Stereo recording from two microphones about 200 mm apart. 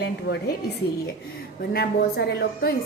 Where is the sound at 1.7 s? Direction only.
50° left (ahead or behind).